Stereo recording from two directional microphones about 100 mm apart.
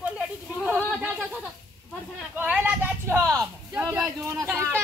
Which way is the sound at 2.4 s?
10° right (ahead or behind).